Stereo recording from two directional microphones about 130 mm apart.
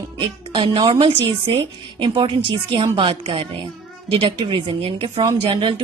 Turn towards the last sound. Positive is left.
turn(degrees=-40)  # may be behind; listen again after turning